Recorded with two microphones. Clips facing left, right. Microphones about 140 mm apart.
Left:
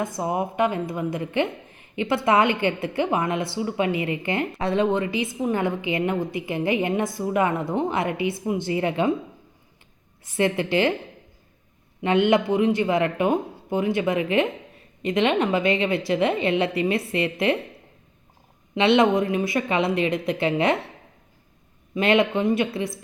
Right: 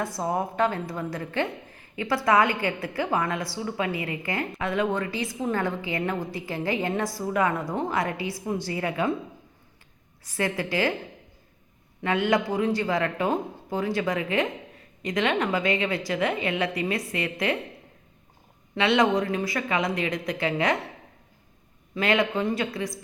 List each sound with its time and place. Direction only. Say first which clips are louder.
0.0 s speech: left 2 dB; 15° left (ahead or behind)
10.2 s speech: left 5 dB; 25° left (ahead or behind)
12.0 s speech: left 5 dB; 25° left (ahead or behind)
18.7 s speech: left 4 dB; 25° left (ahead or behind)
21.9 s speech: left 4 dB; 25° left (ahead or behind)